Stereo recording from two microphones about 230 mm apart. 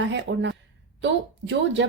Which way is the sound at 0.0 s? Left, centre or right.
Right.